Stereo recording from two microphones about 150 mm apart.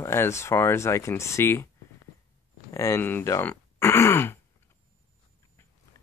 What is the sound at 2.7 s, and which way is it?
Speech, 20° left (ahead or behind).